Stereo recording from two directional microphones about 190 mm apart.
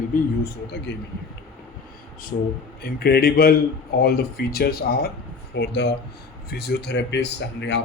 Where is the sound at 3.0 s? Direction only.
55° left (ahead or behind).